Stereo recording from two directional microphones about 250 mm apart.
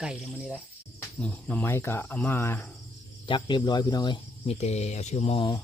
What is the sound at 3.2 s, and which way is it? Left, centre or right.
Speech, centre.